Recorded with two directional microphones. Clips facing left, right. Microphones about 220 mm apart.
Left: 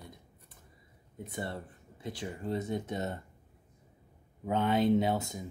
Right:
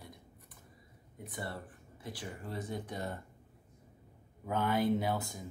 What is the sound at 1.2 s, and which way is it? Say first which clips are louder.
A woman's voice: left 4 dB; 25° left (ahead or behind).